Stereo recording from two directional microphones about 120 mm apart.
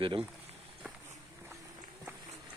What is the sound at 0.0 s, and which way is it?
Speech, 45° right (ahead or behind).